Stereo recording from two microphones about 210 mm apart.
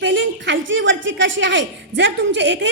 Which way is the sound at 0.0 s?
60° right (ahead or behind).